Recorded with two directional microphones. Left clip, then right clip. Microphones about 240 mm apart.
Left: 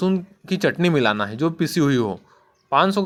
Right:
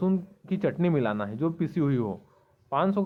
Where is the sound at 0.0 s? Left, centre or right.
Centre.